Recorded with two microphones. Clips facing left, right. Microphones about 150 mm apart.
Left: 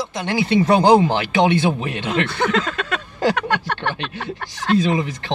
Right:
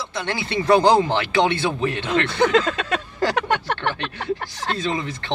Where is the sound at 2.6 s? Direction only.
25° right (ahead or behind).